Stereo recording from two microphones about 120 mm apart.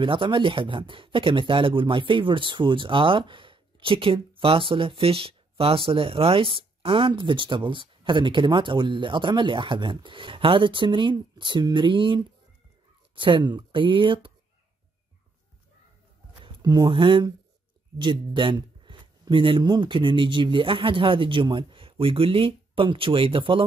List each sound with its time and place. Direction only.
0.0 s speech: 45° right (ahead or behind)
16.4 s a sound: 40° right (ahead or behind)
16.9 s speech: 40° right (ahead or behind)